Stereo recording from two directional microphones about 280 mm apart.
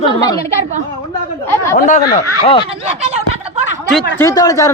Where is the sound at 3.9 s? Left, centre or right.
Centre.